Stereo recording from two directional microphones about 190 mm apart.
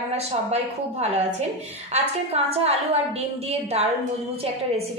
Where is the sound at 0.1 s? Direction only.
35° right (ahead or behind).